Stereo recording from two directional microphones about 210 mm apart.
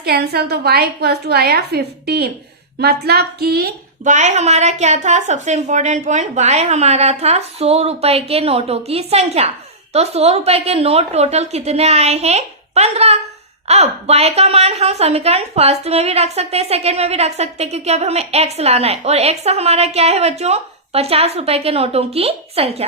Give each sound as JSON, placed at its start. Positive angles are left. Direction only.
{"t": 0.0, "sound": "a woman's voice", "side_deg": -50}